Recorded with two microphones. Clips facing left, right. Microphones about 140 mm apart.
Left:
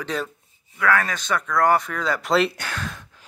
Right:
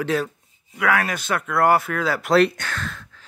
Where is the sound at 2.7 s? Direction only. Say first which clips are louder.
Even; 15° left (ahead or behind).